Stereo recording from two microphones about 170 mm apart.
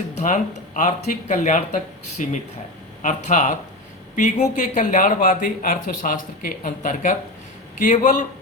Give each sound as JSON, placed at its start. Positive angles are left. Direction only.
{"t": 0.2, "sound": "speech", "side_deg": 50}